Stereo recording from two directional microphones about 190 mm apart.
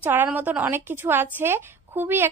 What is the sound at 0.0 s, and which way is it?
A woman's voice, 10° right (ahead or behind).